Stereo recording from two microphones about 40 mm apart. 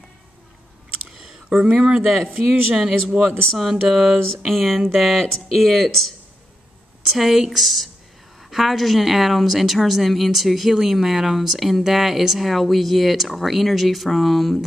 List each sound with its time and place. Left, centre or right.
1.1 s a sound: centre
1.6 s speech: right
2.0 s speech: centre
3.3 s speech: centre
4.5 s speech: centre